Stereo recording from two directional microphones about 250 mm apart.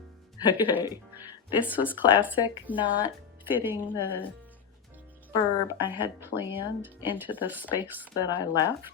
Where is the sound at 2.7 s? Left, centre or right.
Centre.